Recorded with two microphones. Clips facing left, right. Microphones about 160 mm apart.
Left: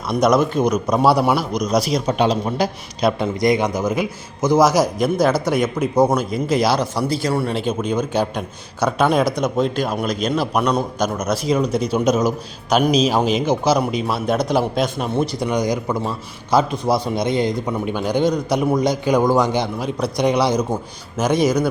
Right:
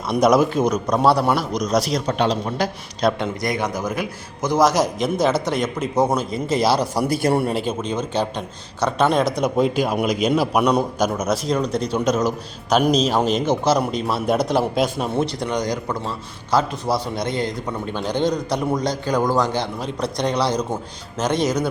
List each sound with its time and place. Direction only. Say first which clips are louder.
0.1 s a man's voice: even; 5° right (ahead or behind)
6.7 s a man's voice: even; 40° right (ahead or behind)
7.8 s a man's voice: left 3 dB; 5° left (ahead or behind)
9.3 s a man's voice: right 1 dB; 10° right (ahead or behind)
11.4 s a man's voice: left 3 dB; 5° left (ahead or behind)